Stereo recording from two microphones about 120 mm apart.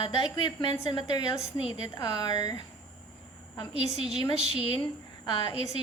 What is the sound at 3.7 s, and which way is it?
Speech, 60° right (ahead or behind).